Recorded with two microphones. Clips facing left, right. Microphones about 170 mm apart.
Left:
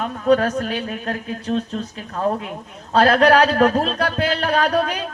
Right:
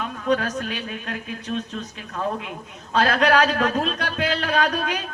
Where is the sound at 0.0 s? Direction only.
35° left (ahead or behind).